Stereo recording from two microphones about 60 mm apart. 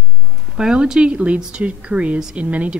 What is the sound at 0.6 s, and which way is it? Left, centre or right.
Speech, centre.